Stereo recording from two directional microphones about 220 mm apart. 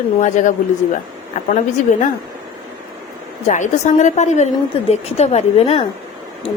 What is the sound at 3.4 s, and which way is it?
A woman's voice, 35° left (ahead or behind).